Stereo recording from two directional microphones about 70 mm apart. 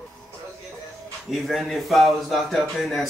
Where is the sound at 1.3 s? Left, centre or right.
Centre.